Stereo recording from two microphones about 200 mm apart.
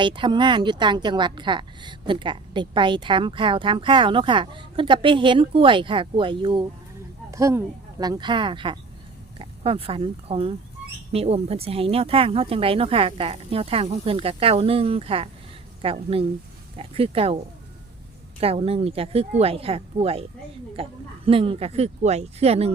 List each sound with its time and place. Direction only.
0.0 s a woman's voice: 25° right (ahead or behind)
18.3 s a woman's voice: 30° right (ahead or behind)